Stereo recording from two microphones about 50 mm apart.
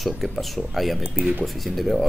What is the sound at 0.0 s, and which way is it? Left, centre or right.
Speech, centre.